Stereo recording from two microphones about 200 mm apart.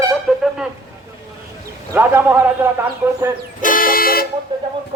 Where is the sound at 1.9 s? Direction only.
10° right (ahead or behind).